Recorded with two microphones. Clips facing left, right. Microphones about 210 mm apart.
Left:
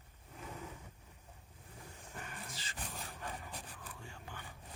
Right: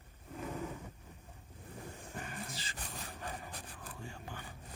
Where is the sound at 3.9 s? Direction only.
40° right (ahead or behind).